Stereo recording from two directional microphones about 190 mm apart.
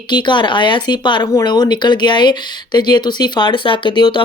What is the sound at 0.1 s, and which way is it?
Speech, 25° left (ahead or behind).